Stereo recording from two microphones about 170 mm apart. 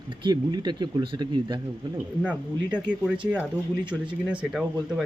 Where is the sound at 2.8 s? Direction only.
25° right (ahead or behind).